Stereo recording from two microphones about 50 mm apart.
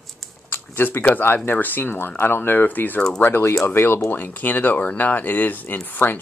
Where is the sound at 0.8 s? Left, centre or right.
Left.